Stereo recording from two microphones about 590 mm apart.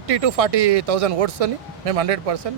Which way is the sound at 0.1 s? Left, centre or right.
Right.